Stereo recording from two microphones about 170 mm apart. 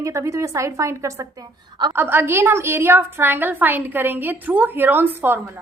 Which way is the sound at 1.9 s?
10° right (ahead or behind).